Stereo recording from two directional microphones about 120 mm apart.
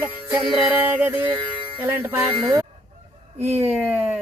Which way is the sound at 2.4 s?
30° right (ahead or behind).